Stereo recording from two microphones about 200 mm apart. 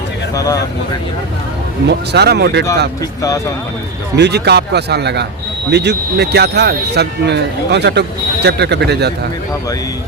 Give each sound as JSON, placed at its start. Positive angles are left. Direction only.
{"t": 1.9, "sound": "speech", "side_deg": -55}
{"t": 3.2, "sound": "speech", "side_deg": 15}
{"t": 4.2, "sound": "speech", "side_deg": -55}